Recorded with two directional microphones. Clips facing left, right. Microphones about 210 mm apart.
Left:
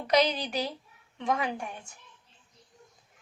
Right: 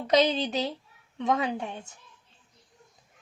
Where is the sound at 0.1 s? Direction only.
25° right (ahead or behind).